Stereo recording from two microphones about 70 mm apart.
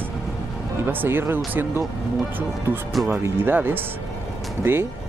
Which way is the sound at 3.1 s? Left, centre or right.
Right.